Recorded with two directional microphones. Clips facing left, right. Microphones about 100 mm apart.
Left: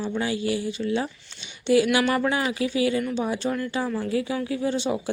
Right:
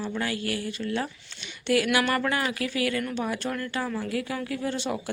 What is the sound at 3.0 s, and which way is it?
Speech, centre (ahead or behind).